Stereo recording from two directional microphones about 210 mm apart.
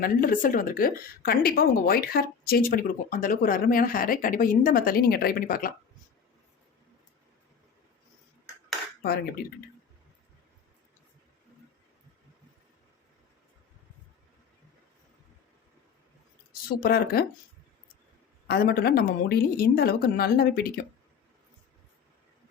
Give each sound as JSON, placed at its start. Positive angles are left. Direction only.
{"t": 0.0, "sound": "speech", "side_deg": 45}
{"t": 9.0, "sound": "speech", "side_deg": 50}
{"t": 16.8, "sound": "speech", "side_deg": 45}
{"t": 18.4, "sound": "speech", "side_deg": 45}